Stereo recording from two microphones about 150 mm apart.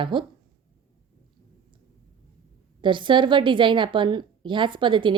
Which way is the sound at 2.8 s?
30° right (ahead or behind).